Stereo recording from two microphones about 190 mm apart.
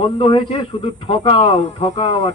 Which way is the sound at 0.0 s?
30° left (ahead or behind).